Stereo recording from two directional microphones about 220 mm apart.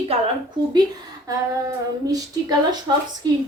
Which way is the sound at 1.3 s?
15° right (ahead or behind).